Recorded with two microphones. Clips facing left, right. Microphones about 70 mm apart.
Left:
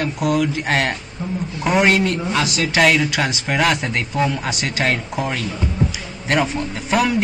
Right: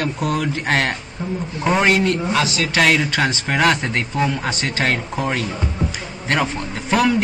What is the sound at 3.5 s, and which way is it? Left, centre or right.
Speech, centre.